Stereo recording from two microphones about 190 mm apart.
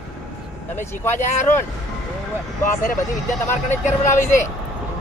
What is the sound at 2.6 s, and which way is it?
Speech, 45° left (ahead or behind).